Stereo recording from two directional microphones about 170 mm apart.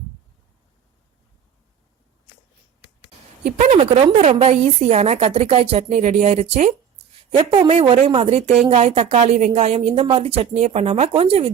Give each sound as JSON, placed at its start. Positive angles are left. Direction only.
{"t": 2.8, "sound": "a woman's voice", "side_deg": -50}